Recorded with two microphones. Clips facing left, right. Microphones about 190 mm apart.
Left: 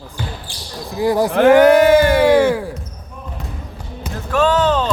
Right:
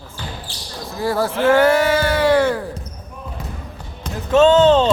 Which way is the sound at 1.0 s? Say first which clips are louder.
Left 4 dB; 15° left (ahead or behind).